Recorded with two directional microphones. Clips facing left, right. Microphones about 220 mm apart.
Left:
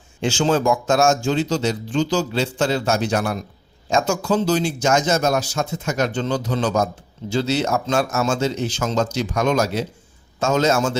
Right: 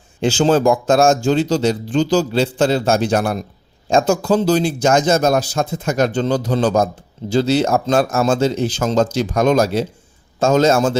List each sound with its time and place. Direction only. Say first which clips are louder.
0.3 s speech: right 4 dB; 35° right (ahead or behind)